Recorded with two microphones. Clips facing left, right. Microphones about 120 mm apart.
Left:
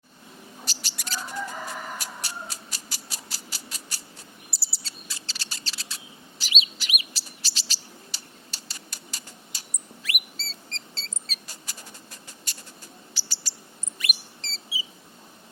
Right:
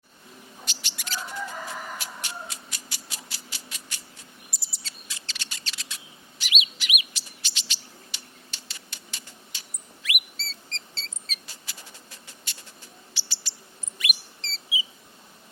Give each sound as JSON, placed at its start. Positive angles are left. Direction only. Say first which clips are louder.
{"t": 0.6, "sound": "speech", "louder": "left 1 dB", "side_deg": 35}
{"t": 2.0, "sound": "cat", "louder": "left 1 dB", "side_deg": 40}
{"t": 4.5, "sound": "bird", "louder": "left 1 dB", "side_deg": 35}
{"t": 6.4, "sound": "chirp", "louder": "right 1 dB", "side_deg": 35}
{"t": 12.5, "sound": "a sound", "louder": "even", "side_deg": 40}
{"t": 13.1, "sound": "bird", "louder": "left 1 dB", "side_deg": 40}
{"t": 14.0, "sound": "a sound", "louder": "right 1 dB", "side_deg": 40}